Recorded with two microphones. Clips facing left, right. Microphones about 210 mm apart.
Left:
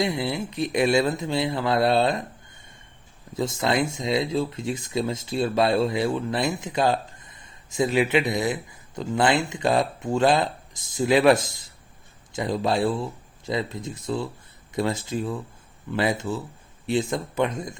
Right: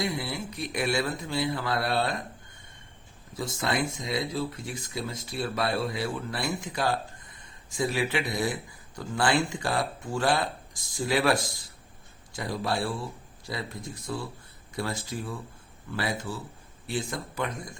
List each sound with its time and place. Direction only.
0.0 s speech: 20° left (ahead or behind)
3.3 s speech: 25° left (ahead or behind)